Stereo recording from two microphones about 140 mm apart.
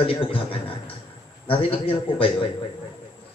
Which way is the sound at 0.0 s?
40° left (ahead or behind).